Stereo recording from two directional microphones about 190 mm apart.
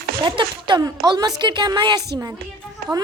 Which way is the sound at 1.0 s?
20° right (ahead or behind).